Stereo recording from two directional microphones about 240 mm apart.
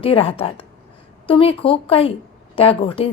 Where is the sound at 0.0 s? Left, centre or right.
Left.